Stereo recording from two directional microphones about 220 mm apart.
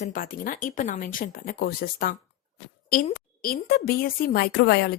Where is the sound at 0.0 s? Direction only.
40° left (ahead or behind).